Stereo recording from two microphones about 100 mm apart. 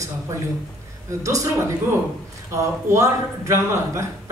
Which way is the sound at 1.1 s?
35° right (ahead or behind).